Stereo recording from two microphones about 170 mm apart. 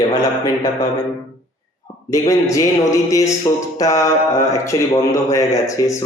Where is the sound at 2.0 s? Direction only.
20° left (ahead or behind).